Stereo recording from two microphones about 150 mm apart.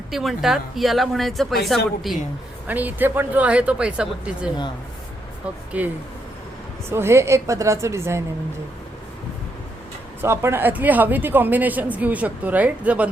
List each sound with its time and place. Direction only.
0.1 s speech: centre (ahead or behind)
2.6 s a woman's voice: 10° right (ahead or behind)
5.7 s a woman's voice: 10° right (ahead or behind)
6.9 s a woman's voice: 15° right (ahead or behind)
10.2 s a woman's voice: 15° right (ahead or behind)